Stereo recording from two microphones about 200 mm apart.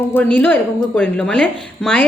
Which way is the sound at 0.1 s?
10° left (ahead or behind).